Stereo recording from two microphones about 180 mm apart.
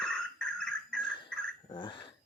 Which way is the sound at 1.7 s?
25° left (ahead or behind).